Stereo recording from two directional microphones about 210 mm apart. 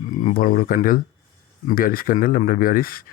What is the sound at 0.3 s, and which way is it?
Speech, 45° left (ahead or behind).